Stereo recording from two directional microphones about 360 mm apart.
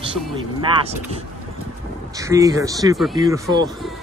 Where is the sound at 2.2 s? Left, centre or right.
Centre.